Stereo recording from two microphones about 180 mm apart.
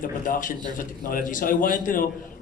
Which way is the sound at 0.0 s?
50° left (ahead or behind).